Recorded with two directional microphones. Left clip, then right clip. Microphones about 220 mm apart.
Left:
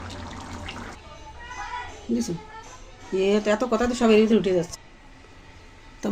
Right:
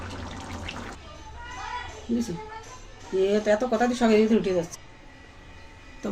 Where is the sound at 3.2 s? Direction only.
40° left (ahead or behind).